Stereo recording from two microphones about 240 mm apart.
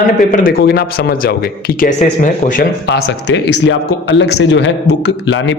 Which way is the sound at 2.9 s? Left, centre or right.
Left.